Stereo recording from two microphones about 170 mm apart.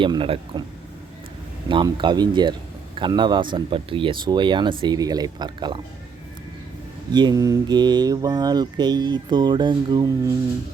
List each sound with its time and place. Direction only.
0.0 s a man's voice: 30° right (ahead or behind)
1.6 s a man's voice: 30° right (ahead or behind)
7.1 s a man's voice: 25° right (ahead or behind)